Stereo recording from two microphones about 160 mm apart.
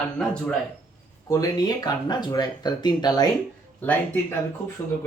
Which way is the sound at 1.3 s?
25° left (ahead or behind).